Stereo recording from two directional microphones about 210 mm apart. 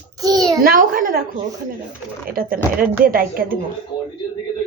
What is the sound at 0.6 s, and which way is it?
Speech, 40° right (ahead or behind).